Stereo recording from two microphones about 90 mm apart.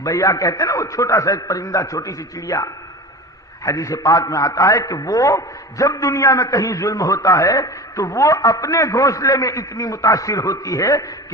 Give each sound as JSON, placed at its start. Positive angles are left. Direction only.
{"t": 0.0, "sound": "a man's voice", "side_deg": 40}